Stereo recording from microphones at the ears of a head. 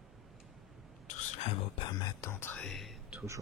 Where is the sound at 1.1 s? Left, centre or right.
Left.